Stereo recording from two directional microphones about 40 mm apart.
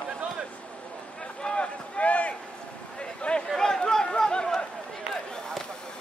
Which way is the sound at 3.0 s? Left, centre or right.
Left.